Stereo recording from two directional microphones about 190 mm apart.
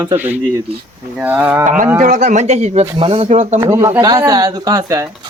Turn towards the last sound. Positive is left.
turn(degrees=-20)  # may be behind; listen again after turning